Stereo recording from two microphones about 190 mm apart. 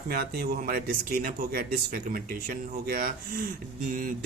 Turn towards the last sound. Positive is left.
turn(degrees=-50)  # may be behind; listen again after turning